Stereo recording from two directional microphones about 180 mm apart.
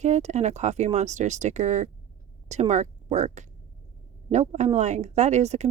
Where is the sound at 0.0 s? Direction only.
40° right (ahead or behind).